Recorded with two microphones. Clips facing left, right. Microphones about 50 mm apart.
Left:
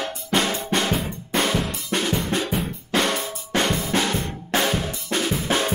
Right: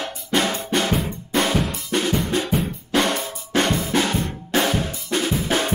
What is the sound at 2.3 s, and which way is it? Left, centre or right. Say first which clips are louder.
Drum: right 2 dB; centre.